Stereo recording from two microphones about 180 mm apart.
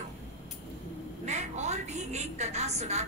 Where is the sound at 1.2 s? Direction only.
40° right (ahead or behind).